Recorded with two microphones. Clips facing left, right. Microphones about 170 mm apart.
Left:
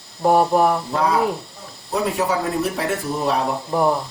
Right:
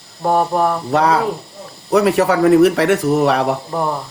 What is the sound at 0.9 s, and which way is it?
Speech, 75° right (ahead or behind).